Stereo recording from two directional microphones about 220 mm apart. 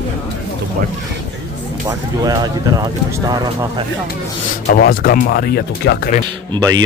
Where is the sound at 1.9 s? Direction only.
15° right (ahead or behind).